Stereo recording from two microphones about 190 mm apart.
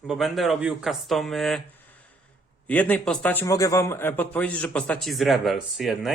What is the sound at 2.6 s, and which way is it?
A man's voice, 10° left (ahead or behind).